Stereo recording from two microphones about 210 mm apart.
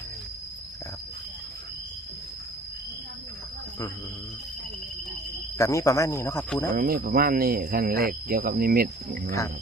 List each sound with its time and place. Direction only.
5.5 s speech: 15° left (ahead or behind)
6.7 s speech: 45° right (ahead or behind)